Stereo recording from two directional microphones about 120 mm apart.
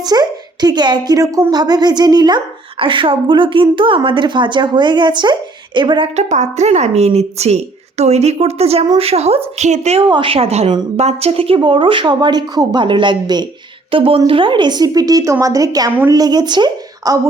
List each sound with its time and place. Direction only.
0.0 s a woman's voice: 35° right (ahead or behind)
6.1 s a woman's voice: 75° right (ahead or behind)
10.1 s speech: 45° right (ahead or behind)
13.9 s a woman's voice: 50° right (ahead or behind); by 17.2 s 35° right (ahead or behind)